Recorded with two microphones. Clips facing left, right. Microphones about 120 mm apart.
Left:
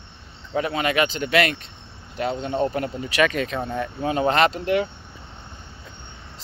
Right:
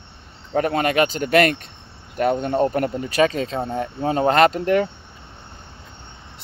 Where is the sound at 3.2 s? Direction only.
30° right (ahead or behind); by 4.9 s 45° right (ahead or behind).